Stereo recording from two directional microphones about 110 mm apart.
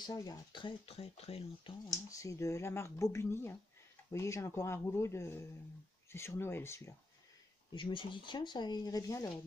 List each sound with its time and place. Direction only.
0.0 s speech: 35° left (ahead or behind)
0.5 s speech: 50° left (ahead or behind); by 1.4 s 65° left (ahead or behind)
1.9 s speech: 30° left (ahead or behind)
7.7 s speech: 50° left (ahead or behind); by 9.3 s 35° left (ahead or behind)